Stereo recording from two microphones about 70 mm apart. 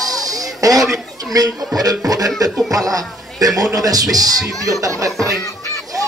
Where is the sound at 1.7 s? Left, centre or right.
Right.